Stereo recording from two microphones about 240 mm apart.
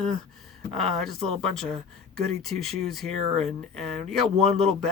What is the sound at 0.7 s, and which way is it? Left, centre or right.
Speech, centre.